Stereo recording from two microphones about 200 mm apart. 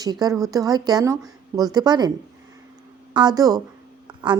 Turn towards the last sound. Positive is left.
turn(degrees=-20)  # may be behind; listen again after turning